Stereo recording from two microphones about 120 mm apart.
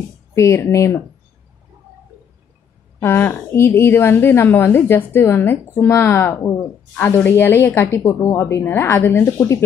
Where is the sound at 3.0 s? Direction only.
20° left (ahead or behind).